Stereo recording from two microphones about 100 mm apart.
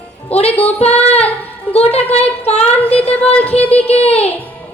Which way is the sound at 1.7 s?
90° left.